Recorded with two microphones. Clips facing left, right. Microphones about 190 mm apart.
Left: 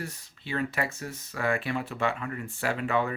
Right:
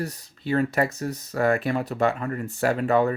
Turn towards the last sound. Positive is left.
turn(degrees=-40)  # may be behind; listen again after turning